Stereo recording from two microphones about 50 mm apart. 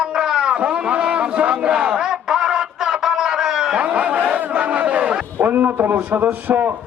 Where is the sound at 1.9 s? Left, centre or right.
Centre.